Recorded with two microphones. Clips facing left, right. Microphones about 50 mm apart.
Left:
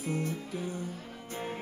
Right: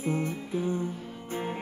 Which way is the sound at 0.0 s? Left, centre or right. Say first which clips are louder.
Right 4 dB; right.